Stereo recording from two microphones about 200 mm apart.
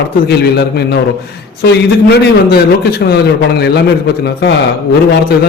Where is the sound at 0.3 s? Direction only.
55° left (ahead or behind).